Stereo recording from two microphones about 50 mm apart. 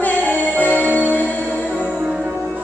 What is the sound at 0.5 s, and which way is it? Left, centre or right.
Music, right.